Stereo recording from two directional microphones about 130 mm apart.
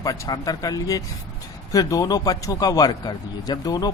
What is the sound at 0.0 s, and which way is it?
A man's voice, 25° left (ahead or behind).